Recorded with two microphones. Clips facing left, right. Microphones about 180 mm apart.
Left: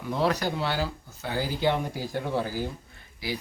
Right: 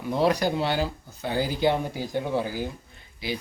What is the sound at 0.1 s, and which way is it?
Speech, 15° right (ahead or behind).